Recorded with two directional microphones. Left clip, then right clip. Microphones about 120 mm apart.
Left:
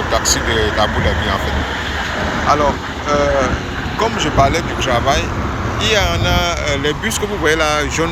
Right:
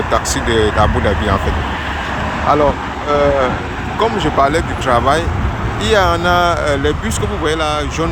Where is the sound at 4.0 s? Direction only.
45° right (ahead or behind).